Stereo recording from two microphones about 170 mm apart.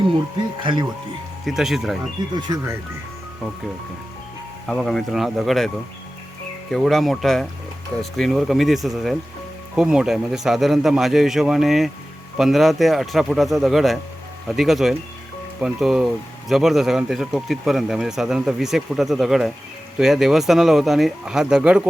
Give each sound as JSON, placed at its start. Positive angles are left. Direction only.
{"t": 0.6, "sound": "speech", "side_deg": -30}
{"t": 1.5, "sound": "speech", "side_deg": 0}
{"t": 2.3, "sound": "speech", "side_deg": -20}
{"t": 4.7, "sound": "speech", "side_deg": 0}